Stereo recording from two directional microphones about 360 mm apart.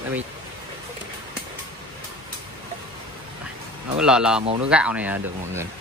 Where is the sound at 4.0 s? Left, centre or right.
Centre.